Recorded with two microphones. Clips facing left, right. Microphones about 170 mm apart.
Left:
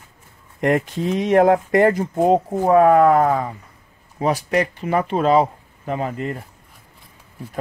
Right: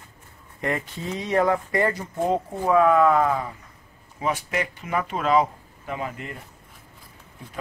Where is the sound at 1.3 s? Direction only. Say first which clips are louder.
Left 7 dB; 55° left (ahead or behind); by 6.3 s 40° left (ahead or behind).